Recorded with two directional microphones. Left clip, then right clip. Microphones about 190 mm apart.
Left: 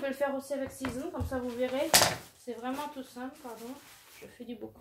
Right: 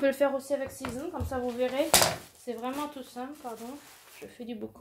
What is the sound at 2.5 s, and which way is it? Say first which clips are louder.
Speech: right 3 dB; 55° right (ahead or behind).